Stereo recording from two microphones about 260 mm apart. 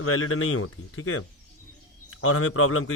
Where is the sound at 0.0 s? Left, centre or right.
Left.